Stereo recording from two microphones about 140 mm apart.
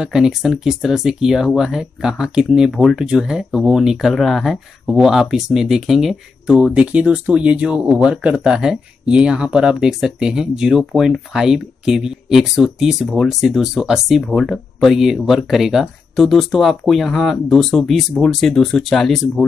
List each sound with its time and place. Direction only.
0.0 s speech: 5° right (ahead or behind)